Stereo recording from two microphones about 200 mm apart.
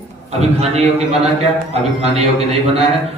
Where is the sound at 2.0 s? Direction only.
30° right (ahead or behind).